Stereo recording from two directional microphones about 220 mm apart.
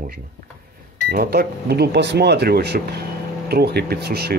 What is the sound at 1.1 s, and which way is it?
Speech, 45° right (ahead or behind).